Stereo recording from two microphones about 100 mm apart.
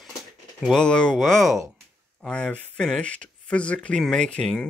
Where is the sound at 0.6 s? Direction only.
10° left (ahead or behind).